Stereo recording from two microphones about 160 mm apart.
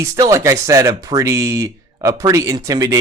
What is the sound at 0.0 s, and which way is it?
Speech, 20° right (ahead or behind).